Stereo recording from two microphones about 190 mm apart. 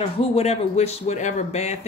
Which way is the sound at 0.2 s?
35° left (ahead or behind).